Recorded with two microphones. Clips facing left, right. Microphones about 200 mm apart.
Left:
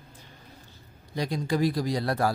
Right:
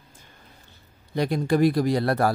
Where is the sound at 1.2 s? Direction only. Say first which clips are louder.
Right 5 dB; 60° right (ahead or behind).